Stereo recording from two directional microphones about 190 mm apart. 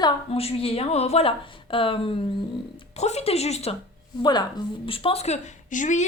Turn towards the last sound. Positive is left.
turn(degrees=40)  # may be behind; listen again after turning